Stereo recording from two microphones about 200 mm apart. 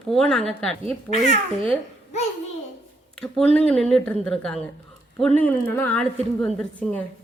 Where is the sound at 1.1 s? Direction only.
35° left (ahead or behind).